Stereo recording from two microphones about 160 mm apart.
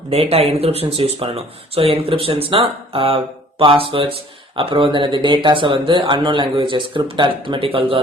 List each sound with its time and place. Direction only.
0.1 s speech: 40° right (ahead or behind)